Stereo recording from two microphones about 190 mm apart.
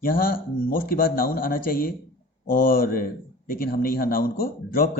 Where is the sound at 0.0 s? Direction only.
50° left (ahead or behind).